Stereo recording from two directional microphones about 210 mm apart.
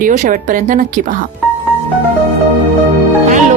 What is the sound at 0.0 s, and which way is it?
Speech, 40° right (ahead or behind).